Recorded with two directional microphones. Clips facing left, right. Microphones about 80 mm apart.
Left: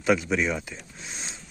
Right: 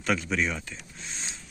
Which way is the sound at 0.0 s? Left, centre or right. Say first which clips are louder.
Left 4 dB; centre.